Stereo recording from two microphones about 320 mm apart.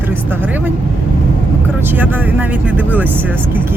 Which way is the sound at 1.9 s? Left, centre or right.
Centre.